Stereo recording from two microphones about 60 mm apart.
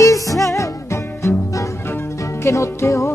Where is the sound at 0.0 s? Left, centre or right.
Left.